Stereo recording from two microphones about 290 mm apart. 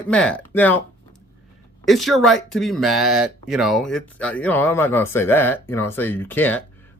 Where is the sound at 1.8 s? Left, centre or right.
Centre.